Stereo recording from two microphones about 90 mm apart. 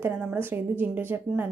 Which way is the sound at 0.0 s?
20° right (ahead or behind).